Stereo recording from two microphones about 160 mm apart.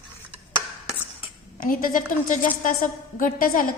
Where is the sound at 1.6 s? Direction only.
60° left (ahead or behind).